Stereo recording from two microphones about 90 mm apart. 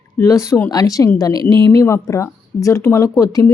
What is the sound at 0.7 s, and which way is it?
Speech, 45° left (ahead or behind).